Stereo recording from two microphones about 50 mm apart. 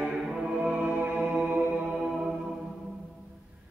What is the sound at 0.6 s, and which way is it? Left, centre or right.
Music, right.